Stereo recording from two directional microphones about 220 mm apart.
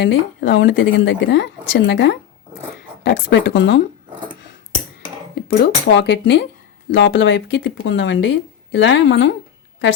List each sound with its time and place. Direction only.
0.0 s a woman's voice: 55° left (ahead or behind)
5.3 s a woman's voice: 50° left (ahead or behind)